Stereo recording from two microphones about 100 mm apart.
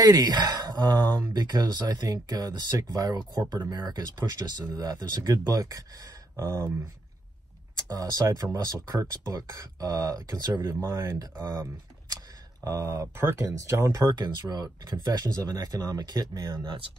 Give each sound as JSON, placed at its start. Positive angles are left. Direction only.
{"t": 0.0, "sound": "speech", "side_deg": -40}
{"t": 7.7, "sound": "speech", "side_deg": -40}
{"t": 12.6, "sound": "speech", "side_deg": -30}
{"t": 14.1, "sound": "speech", "side_deg": -45}